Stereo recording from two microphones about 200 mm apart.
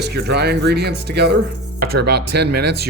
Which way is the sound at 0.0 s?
55° right (ahead or behind).